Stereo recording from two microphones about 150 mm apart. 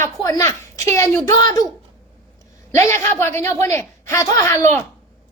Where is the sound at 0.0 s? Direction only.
20° left (ahead or behind).